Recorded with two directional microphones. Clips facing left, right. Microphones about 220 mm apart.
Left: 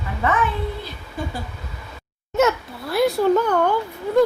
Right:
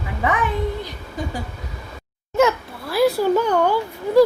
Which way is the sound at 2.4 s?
Centre (ahead or behind).